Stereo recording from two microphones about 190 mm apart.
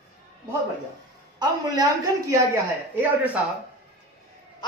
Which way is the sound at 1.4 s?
20° right (ahead or behind).